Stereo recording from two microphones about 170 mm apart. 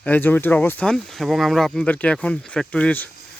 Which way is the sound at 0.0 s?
10° left (ahead or behind).